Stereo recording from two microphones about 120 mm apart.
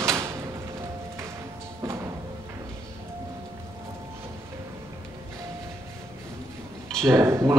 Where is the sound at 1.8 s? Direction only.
25° right (ahead or behind).